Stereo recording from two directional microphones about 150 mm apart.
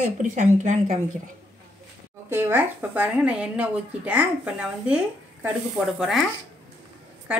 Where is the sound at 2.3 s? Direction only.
15° right (ahead or behind).